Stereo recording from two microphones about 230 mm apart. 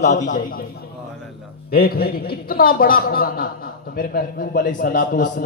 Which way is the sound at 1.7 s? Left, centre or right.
Left.